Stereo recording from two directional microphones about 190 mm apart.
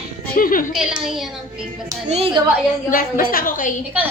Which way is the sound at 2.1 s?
30° right (ahead or behind).